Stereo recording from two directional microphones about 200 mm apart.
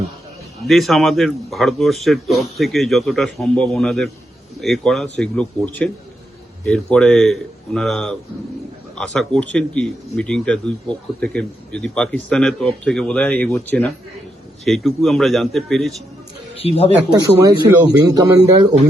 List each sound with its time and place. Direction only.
0.7 s speech: centre (ahead or behind)
16.6 s speech: 30° left (ahead or behind)
17.1 s speech: 20° right (ahead or behind)